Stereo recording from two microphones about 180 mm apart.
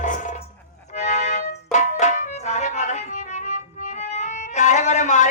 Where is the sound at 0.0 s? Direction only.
45° left (ahead or behind).